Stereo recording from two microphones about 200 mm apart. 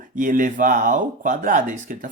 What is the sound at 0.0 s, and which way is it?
Speech, 40° right (ahead or behind).